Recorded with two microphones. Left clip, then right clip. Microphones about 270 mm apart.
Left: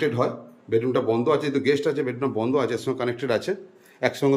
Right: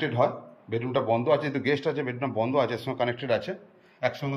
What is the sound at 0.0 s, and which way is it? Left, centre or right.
A man's voice, centre.